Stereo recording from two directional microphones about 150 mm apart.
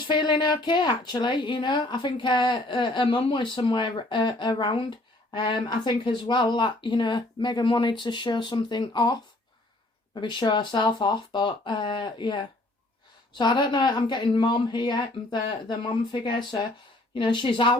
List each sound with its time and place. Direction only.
0.1 s speech: 30° left (ahead or behind)
10.2 s speech: 30° left (ahead or behind)